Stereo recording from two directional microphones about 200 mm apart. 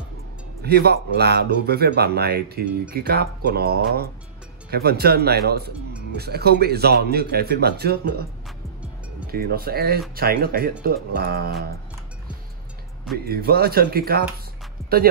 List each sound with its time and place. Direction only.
0.6 s speech: 55° right (ahead or behind)
9.3 s speech: 50° right (ahead or behind)
13.3 s speech: 50° right (ahead or behind)